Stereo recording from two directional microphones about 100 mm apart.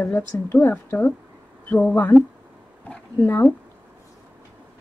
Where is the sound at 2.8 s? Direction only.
15° left (ahead or behind).